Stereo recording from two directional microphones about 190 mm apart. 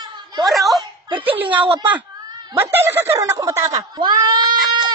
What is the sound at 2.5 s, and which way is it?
Speech, 10° right (ahead or behind).